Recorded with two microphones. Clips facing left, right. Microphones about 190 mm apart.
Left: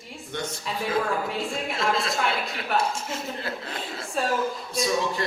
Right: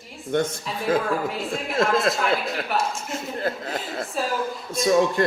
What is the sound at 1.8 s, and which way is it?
Speech, 50° right (ahead or behind).